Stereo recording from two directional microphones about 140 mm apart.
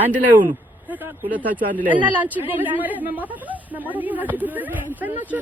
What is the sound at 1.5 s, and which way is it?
Speech, 85° right.